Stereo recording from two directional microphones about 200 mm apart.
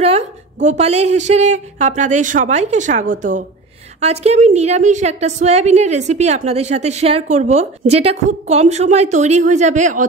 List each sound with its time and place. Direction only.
0.0 s a woman's voice: 35° right (ahead or behind)